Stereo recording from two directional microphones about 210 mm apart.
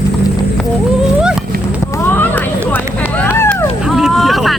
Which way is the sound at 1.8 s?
10° left (ahead or behind).